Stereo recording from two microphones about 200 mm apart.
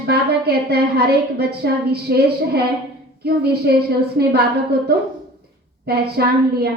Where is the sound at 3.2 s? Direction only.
50° right (ahead or behind).